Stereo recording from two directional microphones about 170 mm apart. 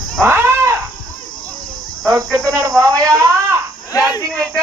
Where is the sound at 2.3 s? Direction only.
20° right (ahead or behind).